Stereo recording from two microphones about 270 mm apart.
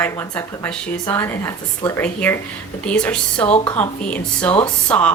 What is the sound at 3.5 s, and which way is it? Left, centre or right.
Speech, left.